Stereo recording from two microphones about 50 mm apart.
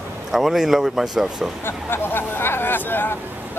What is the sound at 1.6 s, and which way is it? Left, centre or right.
Speech, left.